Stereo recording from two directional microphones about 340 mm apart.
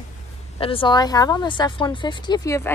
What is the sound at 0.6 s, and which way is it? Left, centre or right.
Speech, centre.